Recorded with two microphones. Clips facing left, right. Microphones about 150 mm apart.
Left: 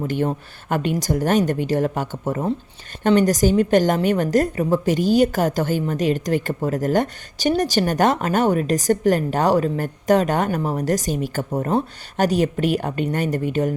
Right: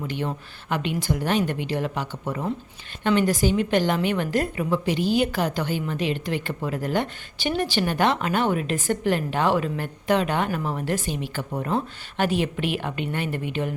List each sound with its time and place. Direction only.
0.1 s a woman's voice: 45° left (ahead or behind)